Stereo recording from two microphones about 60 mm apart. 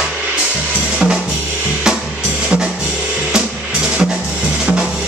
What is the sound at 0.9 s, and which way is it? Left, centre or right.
Drum kit, centre.